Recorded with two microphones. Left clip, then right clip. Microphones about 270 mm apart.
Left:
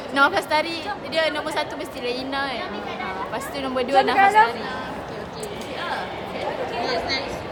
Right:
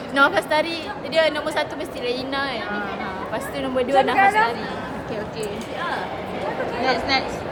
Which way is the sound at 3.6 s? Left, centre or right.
Centre.